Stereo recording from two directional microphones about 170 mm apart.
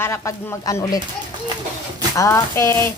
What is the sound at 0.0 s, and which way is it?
Speech, 15° left (ahead or behind).